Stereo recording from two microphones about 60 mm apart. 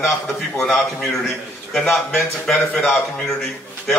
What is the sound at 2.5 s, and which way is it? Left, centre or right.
Speech, centre.